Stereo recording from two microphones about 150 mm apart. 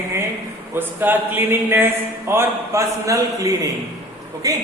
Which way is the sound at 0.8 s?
15° right (ahead or behind).